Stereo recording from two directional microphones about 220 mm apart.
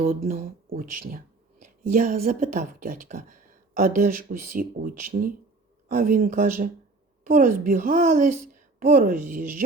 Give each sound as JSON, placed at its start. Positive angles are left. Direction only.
{"t": 0.0, "sound": "speech", "side_deg": -40}